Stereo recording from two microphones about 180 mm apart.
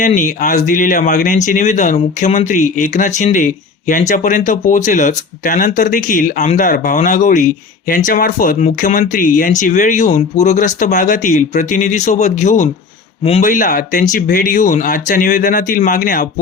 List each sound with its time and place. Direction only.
0.0 s speech: 45° left (ahead or behind)